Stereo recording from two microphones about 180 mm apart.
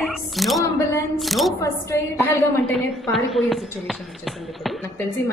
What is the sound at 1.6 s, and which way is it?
Speech, 15° left (ahead or behind).